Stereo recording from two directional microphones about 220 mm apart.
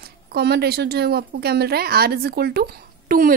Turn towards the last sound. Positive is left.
turn(degrees=-40)  # may be behind; listen again after turning